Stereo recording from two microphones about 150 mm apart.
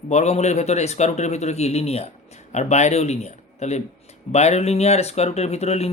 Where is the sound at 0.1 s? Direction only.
50° left (ahead or behind).